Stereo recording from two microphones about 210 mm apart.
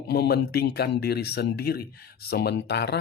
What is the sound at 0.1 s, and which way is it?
Speech, 50° left (ahead or behind).